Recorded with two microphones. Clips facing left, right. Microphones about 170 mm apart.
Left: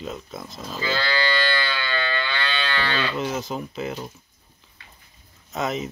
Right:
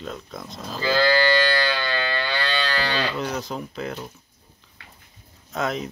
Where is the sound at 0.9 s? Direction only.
45° right (ahead or behind).